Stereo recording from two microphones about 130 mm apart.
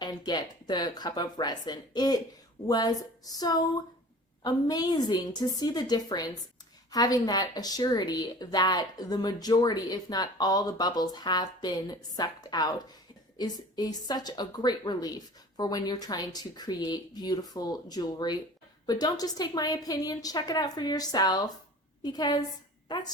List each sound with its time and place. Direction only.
0.3 s a woman's voice: 35° left (ahead or behind)